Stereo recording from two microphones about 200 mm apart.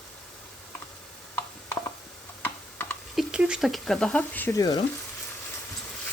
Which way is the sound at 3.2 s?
5° right (ahead or behind).